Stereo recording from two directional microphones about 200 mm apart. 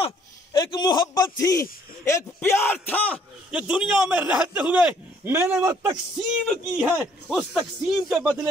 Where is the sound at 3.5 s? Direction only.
5° right (ahead or behind).